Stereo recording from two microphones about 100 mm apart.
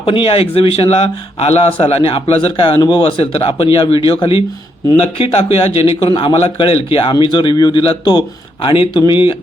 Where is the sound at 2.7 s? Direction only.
40° left (ahead or behind).